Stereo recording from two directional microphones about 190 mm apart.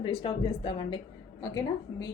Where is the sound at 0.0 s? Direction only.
25° left (ahead or behind).